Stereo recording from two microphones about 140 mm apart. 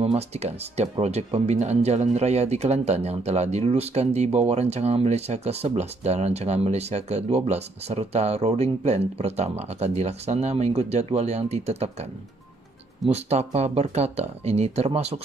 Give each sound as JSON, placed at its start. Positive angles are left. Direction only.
{"t": 0.0, "sound": "speech", "side_deg": -50}
{"t": 13.1, "sound": "speech", "side_deg": -50}